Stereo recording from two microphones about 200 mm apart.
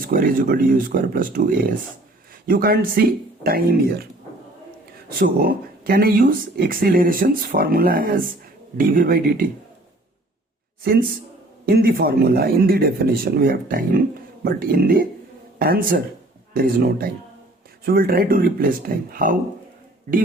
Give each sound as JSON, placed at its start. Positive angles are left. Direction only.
{"t": 0.0, "sound": "speech", "side_deg": -45}
{"t": 5.0, "sound": "speech", "side_deg": -45}
{"t": 11.6, "sound": "speech", "side_deg": -50}